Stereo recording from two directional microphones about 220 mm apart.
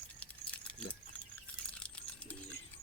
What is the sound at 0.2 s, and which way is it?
Keys jangling, 5° left (ahead or behind).